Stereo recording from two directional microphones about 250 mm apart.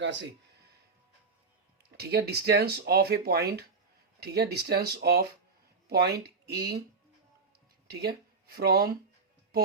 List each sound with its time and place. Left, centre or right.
0.0 s speech: right
2.0 s speech: right
7.9 s speech: right